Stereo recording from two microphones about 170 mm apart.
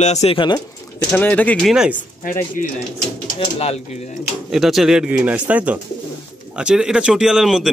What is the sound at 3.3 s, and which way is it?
Speech, 35° left (ahead or behind).